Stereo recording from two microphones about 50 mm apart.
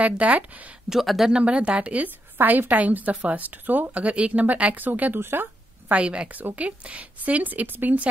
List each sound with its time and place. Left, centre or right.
0.0 s speech: right
0.8 s speech: centre
1.3 s a woman's voice: right
5.2 s speech: right
5.9 s speech: right